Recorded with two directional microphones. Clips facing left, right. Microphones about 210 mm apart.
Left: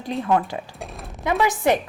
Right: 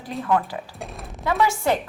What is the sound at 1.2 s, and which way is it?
Speech, 15° left (ahead or behind).